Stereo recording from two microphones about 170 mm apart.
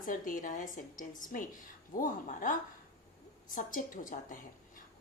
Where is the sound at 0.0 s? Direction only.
50° left (ahead or behind).